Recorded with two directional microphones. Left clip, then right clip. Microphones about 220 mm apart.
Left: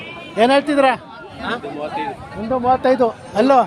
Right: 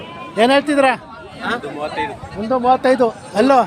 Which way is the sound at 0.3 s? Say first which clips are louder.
Right 1 dB; 5° right (ahead or behind).